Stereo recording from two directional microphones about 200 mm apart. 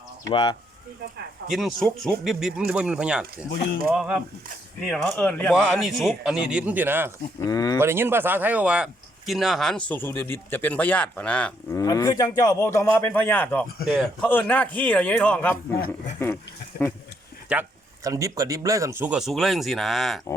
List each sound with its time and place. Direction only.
0.3 s speech: 25° left (ahead or behind)
1.5 s speech: centre (ahead or behind)
7.3 s a man's voice: 20° left (ahead or behind)
7.8 s speech: 10° right (ahead or behind); by 11.8 s 5° left (ahead or behind)
11.8 s a man's voice: 20° left (ahead or behind)
17.5 s speech: 15° right (ahead or behind)